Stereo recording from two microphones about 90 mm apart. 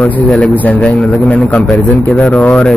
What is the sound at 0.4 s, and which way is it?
A man's voice, 15° left (ahead or behind).